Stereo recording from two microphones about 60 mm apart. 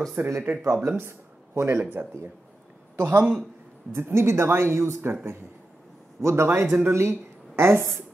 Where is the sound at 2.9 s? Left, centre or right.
Right.